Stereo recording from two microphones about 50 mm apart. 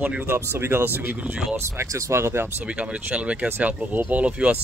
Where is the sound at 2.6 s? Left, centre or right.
Right.